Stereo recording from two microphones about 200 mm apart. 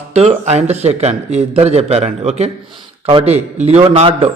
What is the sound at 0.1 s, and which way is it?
A man's voice, 30° right (ahead or behind).